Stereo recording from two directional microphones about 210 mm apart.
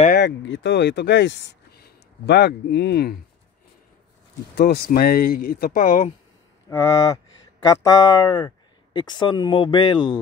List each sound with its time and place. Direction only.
0.2 s speech: 60° left (ahead or behind)
4.6 s speech: 50° left (ahead or behind)
6.7 s a sound: 15° left (ahead or behind)
7.6 s speech: 15° left (ahead or behind)